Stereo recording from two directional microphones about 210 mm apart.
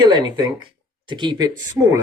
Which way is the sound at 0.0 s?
20° right (ahead or behind).